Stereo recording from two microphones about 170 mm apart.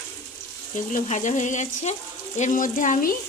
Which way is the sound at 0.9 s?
45° left (ahead or behind).